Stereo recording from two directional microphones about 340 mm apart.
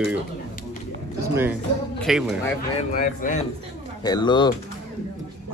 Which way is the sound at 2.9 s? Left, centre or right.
Left.